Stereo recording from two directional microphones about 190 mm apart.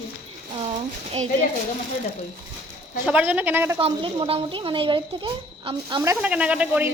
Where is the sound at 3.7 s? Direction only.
25° right (ahead or behind).